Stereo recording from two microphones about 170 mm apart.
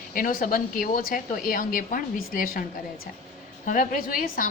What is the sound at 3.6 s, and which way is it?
Speech, 50° left (ahead or behind).